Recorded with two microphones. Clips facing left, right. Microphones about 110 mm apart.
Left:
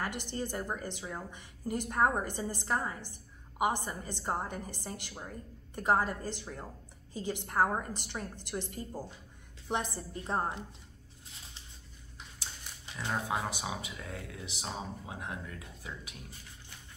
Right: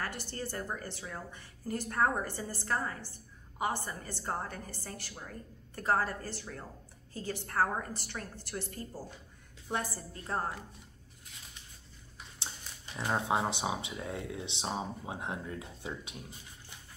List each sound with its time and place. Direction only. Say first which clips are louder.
0.0 s a woman's voice: left 2 dB; 15° left (ahead or behind)
12.9 s speech: right 3 dB; 25° right (ahead or behind)